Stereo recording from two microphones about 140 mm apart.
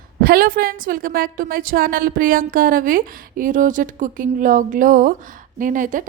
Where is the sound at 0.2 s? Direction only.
90° right.